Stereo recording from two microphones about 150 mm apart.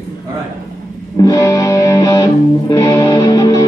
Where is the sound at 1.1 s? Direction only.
25° left (ahead or behind).